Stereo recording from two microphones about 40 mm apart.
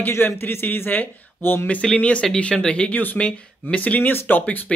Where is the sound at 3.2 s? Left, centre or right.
Left.